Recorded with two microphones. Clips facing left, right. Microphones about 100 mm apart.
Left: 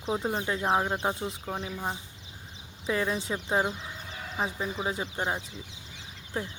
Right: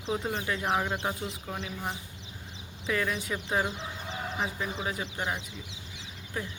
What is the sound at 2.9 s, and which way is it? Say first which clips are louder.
Speech: left 2 dB; 25° left (ahead or behind).